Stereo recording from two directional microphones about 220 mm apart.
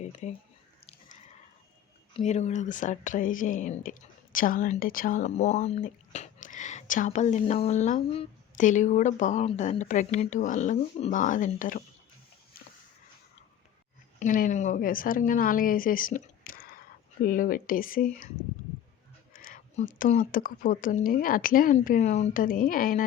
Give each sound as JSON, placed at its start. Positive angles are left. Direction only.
{"t": 0.0, "sound": "a sound", "side_deg": 30}
{"t": 2.1, "sound": "speech", "side_deg": 30}
{"t": 14.2, "sound": "speech", "side_deg": 35}
{"t": 19.3, "sound": "speech", "side_deg": 40}